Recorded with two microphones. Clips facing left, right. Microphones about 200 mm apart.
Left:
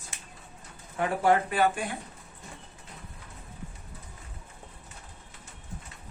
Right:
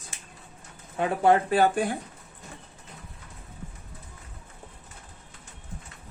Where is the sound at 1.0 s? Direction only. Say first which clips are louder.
Right 3 dB; 30° right (ahead or behind).